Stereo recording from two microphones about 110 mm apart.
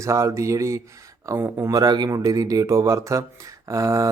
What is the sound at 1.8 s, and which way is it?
A man's voice, 40° right (ahead or behind).